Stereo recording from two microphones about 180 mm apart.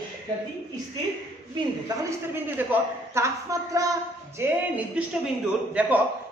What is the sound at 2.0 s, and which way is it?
A woman's voice, 10° right (ahead or behind).